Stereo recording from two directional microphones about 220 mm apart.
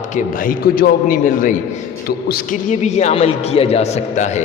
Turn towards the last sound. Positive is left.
turn(degrees=30)  # may be behind; listen again after turning